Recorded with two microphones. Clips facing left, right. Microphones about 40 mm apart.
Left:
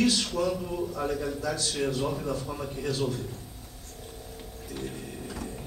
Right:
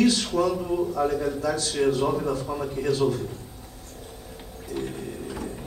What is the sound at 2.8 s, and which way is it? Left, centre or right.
Speech, right.